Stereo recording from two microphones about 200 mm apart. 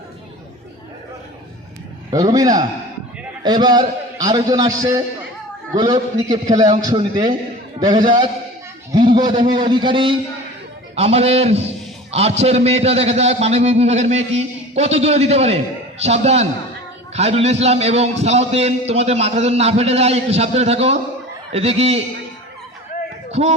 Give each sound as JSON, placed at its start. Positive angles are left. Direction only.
{"t": 2.0, "sound": "a man's voice", "side_deg": -20}
{"t": 23.3, "sound": "a man's voice", "side_deg": -30}